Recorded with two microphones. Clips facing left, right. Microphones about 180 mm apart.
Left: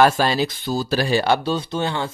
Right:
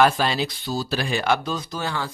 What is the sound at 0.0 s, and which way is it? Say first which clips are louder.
Speech: left 3 dB; 40° left (ahead or behind).